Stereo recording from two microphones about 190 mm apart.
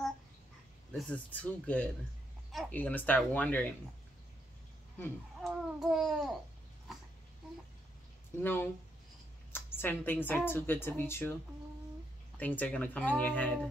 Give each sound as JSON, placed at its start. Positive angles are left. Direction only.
{"t": 0.9, "sound": "speech", "side_deg": 5}
{"t": 4.9, "sound": "speech", "side_deg": 10}
{"t": 5.5, "sound": "babbling", "side_deg": 0}
{"t": 8.4, "sound": "speech", "side_deg": 10}
{"t": 9.5, "sound": "a sound", "side_deg": 10}
{"t": 10.2, "sound": "speech", "side_deg": 10}
{"t": 12.4, "sound": "speech", "side_deg": 10}